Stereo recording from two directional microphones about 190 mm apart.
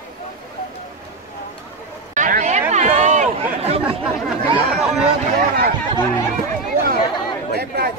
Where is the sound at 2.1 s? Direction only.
45° right (ahead or behind).